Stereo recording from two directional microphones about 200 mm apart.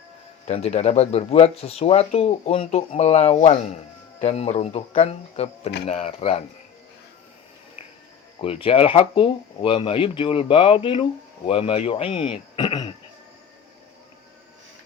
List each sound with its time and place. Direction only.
0.4 s speech: 35° left (ahead or behind)
7.8 s cricket: 30° left (ahead or behind)
8.4 s speech: 30° left (ahead or behind)